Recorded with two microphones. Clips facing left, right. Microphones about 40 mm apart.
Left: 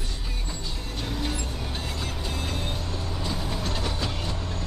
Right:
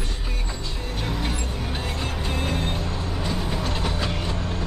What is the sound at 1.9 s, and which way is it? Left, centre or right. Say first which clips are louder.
Music: right 4 dB; right.